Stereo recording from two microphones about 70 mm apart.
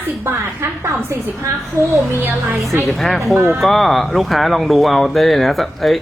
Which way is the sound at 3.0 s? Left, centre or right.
Centre.